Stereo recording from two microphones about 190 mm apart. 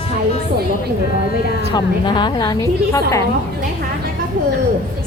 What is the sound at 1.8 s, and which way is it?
Speech, 25° left (ahead or behind).